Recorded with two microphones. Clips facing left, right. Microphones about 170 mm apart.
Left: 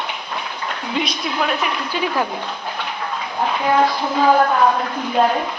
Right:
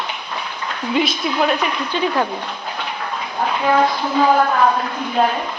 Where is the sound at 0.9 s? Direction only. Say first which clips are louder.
Right 5 dB; 5° right (ahead or behind).